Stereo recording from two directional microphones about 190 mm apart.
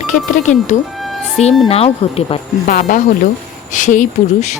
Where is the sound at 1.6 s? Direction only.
30° left (ahead or behind).